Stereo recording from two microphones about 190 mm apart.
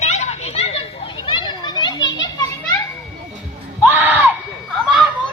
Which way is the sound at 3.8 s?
10° right (ahead or behind).